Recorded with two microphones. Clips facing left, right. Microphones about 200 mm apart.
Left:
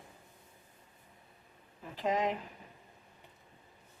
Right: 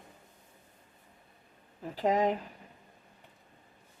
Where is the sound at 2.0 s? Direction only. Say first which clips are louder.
Right 5 dB; 35° right (ahead or behind).